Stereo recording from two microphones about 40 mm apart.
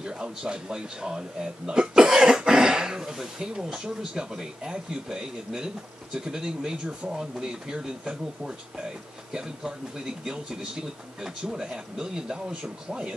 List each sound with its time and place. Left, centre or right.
0.0 s speech: centre